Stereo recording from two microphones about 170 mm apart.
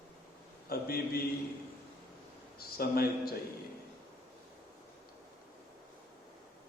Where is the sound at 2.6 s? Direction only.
65° left (ahead or behind).